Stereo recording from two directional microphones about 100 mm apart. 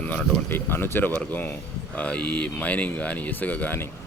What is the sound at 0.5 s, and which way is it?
Speech, 20° left (ahead or behind).